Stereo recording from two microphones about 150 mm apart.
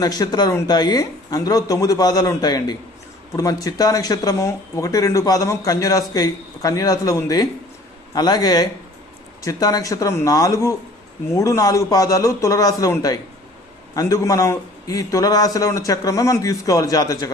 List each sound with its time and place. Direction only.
0.0 s speech: 25° left (ahead or behind)